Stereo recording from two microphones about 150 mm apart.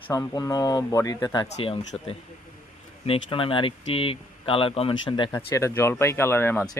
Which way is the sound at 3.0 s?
35° left (ahead or behind).